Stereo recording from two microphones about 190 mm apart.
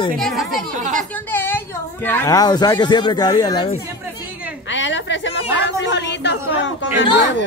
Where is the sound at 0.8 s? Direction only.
40° right (ahead or behind).